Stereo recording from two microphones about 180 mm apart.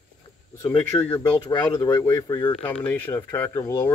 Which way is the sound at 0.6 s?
10° left (ahead or behind).